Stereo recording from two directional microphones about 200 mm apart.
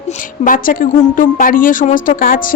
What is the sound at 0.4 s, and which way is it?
A woman's voice, 45° left (ahead or behind).